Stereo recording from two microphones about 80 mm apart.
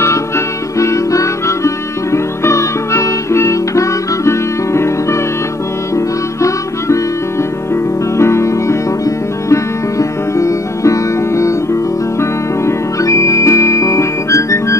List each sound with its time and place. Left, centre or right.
0.7 s music: left
5.9 s music: left
8.2 s music: left